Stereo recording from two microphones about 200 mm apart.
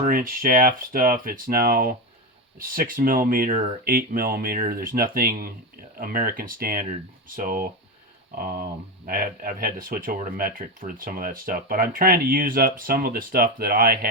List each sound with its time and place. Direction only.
0.0 s speech: 45° right (ahead or behind)